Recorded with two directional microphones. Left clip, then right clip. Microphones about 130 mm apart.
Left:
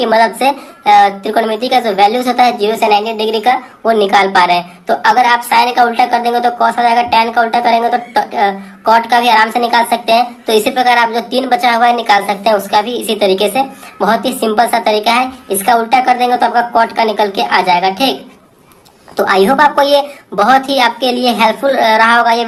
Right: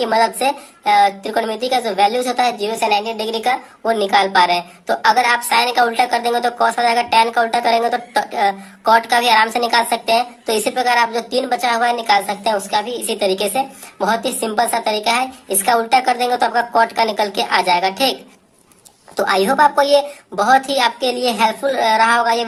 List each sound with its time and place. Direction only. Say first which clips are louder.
0.0 s a woman's voice: left 5 dB; 30° right (ahead or behind)